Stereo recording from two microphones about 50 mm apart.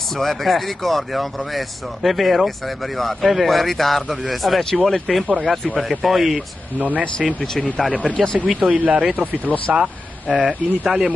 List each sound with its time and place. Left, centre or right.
0.2 s speech: centre
6.8 s speech: right
7.5 s speech: centre
8.5 s speech: right
9.8 s speech: centre